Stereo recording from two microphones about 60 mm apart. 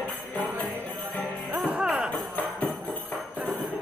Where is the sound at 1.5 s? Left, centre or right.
Right.